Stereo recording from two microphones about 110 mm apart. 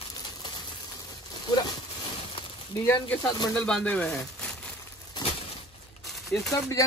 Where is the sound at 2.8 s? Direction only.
20° left (ahead or behind).